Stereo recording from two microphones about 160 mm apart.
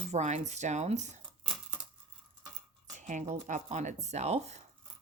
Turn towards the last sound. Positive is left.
turn(degrees=-45)  # may be behind; listen again after turning